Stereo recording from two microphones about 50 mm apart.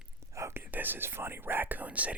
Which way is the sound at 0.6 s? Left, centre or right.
Right.